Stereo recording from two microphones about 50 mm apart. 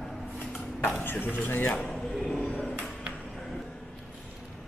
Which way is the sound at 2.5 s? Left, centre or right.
Left.